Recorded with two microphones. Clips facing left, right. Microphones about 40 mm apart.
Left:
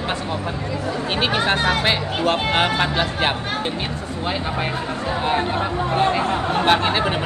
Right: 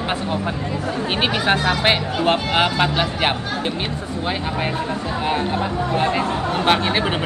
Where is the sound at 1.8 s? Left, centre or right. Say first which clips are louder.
Right 2 dB; right.